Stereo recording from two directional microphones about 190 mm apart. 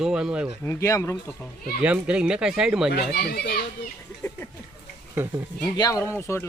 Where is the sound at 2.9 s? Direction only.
55° left (ahead or behind).